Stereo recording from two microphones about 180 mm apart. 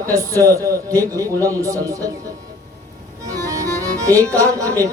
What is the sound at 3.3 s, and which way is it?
Music, 20° right (ahead or behind).